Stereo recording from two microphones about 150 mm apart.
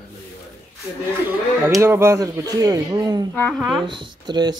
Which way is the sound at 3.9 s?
30° right (ahead or behind).